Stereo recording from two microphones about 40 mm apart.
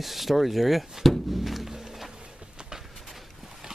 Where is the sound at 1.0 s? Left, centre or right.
Centre.